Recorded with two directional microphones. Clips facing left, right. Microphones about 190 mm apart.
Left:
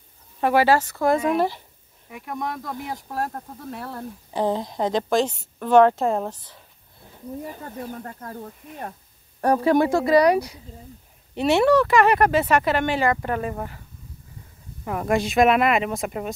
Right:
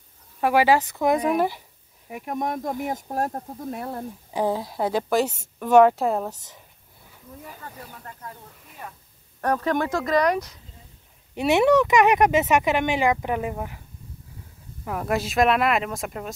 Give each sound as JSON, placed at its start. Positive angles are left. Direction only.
{"t": 0.4, "sound": "speech", "side_deg": -10}
{"t": 2.7, "sound": "speech", "side_deg": -45}
{"t": 3.8, "sound": "speech", "side_deg": -15}
{"t": 7.4, "sound": "speech", "side_deg": 45}
{"t": 9.4, "sound": "speech", "side_deg": 10}
{"t": 11.3, "sound": "speech", "side_deg": -15}
{"t": 14.9, "sound": "speech", "side_deg": 0}